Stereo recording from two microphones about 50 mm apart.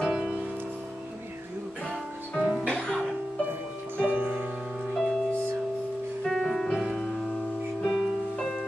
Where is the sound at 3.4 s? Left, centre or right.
Right.